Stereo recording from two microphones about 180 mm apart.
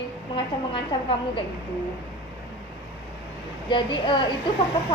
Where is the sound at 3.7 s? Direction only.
25° left (ahead or behind).